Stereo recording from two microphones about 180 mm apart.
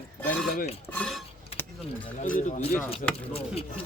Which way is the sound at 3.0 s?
50° left (ahead or behind).